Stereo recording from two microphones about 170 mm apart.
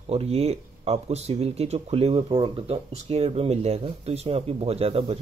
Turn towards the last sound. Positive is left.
turn(degrees=-35)  # may be behind; listen again after turning